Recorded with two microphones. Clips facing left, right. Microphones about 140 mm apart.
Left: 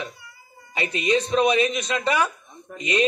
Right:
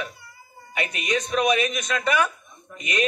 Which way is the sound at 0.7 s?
30° left (ahead or behind).